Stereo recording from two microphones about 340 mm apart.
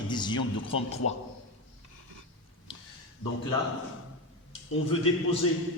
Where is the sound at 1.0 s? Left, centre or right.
Left.